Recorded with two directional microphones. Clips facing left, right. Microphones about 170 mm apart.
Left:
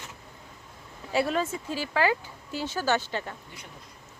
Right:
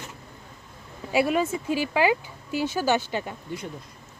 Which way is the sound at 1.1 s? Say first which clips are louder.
Right 4 dB; 10° right (ahead or behind).